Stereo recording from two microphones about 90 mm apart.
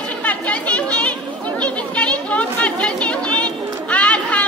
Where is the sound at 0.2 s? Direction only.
15° left (ahead or behind).